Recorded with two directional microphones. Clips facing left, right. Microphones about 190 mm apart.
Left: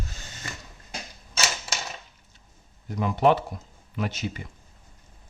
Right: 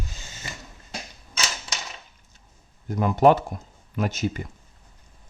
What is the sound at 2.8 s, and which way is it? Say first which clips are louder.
Speech: right 4 dB; 45° right (ahead or behind).